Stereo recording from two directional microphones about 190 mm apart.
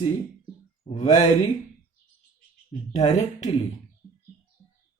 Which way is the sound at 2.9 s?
35° left (ahead or behind).